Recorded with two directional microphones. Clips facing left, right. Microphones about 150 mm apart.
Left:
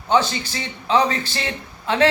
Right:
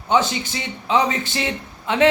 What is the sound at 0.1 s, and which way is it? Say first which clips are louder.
A man's voice: even; 20° right (ahead or behind).